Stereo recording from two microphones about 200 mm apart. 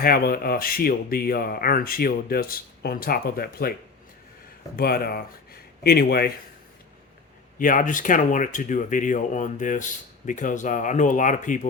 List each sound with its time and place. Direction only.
0.0 s speech: 50° left (ahead or behind)
4.8 s speech: 50° left (ahead or behind)
7.6 s speech: 40° left (ahead or behind)